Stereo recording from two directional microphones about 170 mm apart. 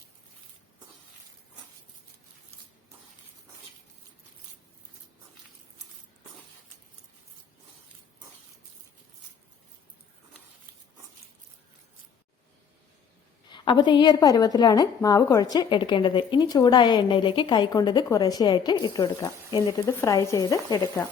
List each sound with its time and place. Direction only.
13.5 s a woman's voice: 25° left (ahead or behind)